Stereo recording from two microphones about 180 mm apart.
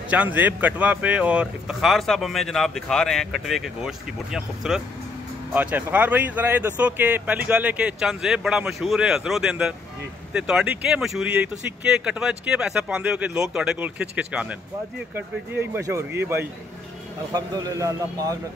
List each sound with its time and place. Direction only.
0.1 s a man's voice: 10° right (ahead or behind)